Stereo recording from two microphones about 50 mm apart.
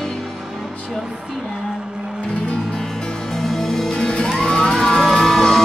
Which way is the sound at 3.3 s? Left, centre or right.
Centre.